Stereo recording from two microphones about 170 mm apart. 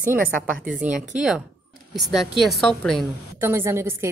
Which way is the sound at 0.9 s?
50° right (ahead or behind).